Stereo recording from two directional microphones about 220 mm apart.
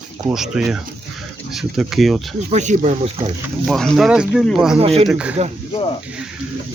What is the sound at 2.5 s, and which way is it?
Speech, 30° right (ahead or behind).